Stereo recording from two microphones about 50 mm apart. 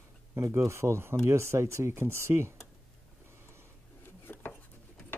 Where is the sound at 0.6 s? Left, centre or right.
Right.